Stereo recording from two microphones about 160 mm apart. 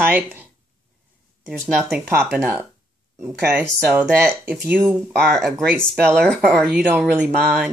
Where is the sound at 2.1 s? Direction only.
5° right (ahead or behind).